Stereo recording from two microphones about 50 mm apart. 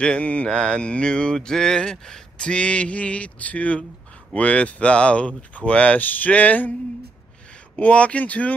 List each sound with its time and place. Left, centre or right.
0.0 s mantra: left
5.7 s speech: left
7.7 s mantra: left